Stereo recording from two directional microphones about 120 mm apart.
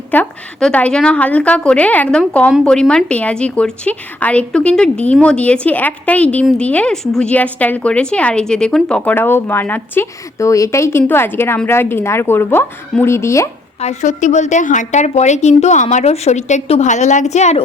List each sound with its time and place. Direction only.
0.1 s a woman's voice: 10° left (ahead or behind)
13.7 s a woman's voice: 75° left (ahead or behind)